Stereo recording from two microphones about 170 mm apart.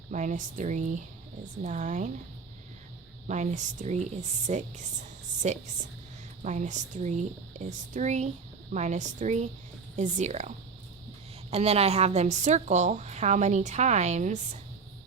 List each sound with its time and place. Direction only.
0.1 s a woman's voice: 45° right (ahead or behind)
3.2 s a woman's voice: 45° right (ahead or behind)
11.5 s a woman's voice: 35° right (ahead or behind)